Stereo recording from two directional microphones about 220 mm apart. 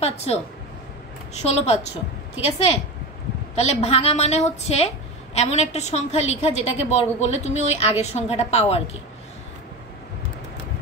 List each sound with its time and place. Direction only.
0.0 s a woman's voice: 30° left (ahead or behind)
1.4 s a woman's voice: 30° left (ahead or behind)